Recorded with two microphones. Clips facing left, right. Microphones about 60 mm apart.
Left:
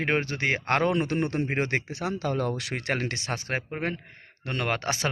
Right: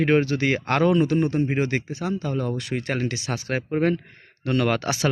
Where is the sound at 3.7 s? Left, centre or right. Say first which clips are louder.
Right 9 dB; centre; by 5.1 s left.